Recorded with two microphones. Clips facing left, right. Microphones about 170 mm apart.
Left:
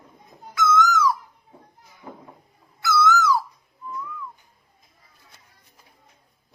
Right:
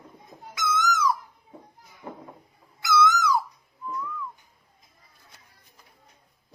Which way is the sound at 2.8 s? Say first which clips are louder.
Left 2 dB; 15° right (ahead or behind).